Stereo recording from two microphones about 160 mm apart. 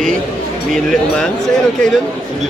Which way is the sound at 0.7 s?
Centre (ahead or behind).